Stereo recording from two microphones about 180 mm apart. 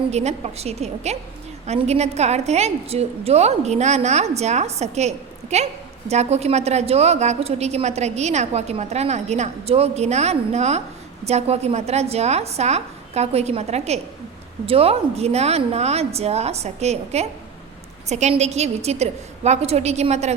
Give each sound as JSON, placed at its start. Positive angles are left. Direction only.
{"t": 0.1, "sound": "a woman's voice", "side_deg": -35}